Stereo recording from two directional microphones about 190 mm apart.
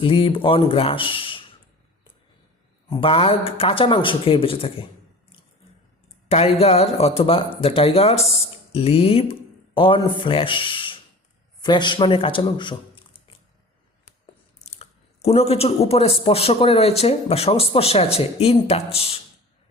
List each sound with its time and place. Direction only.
0.0 s speech: 25° left (ahead or behind)
2.9 s speech: 30° left (ahead or behind)
6.2 s speech: 30° left (ahead or behind)
14.7 s speech: 35° left (ahead or behind)